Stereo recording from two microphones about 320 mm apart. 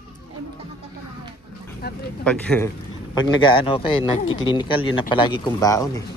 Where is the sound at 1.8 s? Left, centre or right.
Left.